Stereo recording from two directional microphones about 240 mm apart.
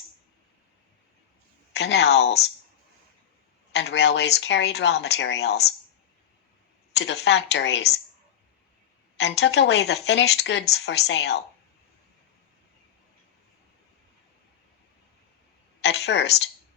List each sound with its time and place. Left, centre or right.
1.7 s speech: left
3.7 s speech: left
6.9 s speech: left
9.1 s speech: left
15.8 s speech: left